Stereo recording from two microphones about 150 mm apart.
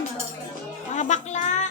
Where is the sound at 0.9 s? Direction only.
50° left (ahead or behind).